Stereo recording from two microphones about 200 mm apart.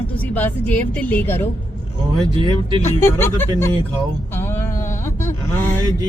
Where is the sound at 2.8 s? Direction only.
10° left (ahead or behind).